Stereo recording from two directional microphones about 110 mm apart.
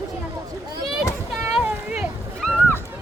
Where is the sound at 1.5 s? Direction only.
5° right (ahead or behind).